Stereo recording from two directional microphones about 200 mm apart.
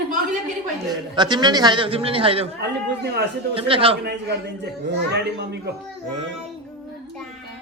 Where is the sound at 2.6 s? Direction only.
55° right (ahead or behind).